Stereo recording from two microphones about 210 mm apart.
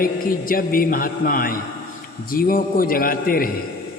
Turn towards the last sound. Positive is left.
turn(degrees=45)  # may be behind; listen again after turning